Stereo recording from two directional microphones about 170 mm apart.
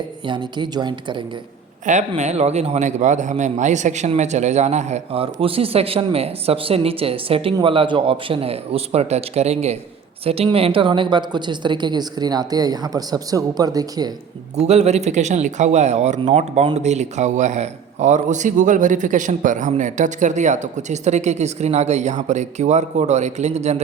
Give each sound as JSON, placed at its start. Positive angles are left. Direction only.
{"t": 0.3, "sound": "a woman's voice", "side_deg": -25}
{"t": 1.9, "sound": "a man's voice", "side_deg": -45}
{"t": 14.5, "sound": "a man's voice", "side_deg": -40}